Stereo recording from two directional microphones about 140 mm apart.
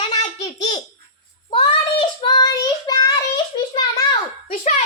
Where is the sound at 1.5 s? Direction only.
35° left (ahead or behind).